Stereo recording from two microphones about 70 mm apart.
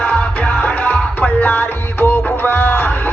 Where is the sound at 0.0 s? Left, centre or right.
Centre.